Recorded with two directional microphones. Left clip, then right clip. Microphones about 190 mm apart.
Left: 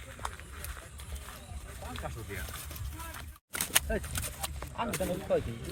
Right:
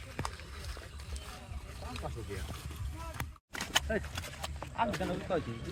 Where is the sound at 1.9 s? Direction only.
Centre (ahead or behind).